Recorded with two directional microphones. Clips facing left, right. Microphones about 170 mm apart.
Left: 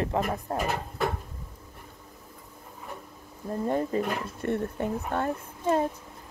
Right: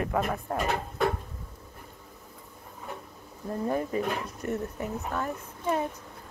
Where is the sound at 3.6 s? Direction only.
25° left (ahead or behind).